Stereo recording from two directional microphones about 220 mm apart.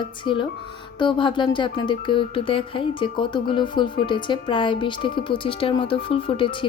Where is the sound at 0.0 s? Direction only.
20° left (ahead or behind).